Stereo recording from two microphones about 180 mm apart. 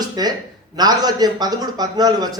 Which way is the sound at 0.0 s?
20° right (ahead or behind).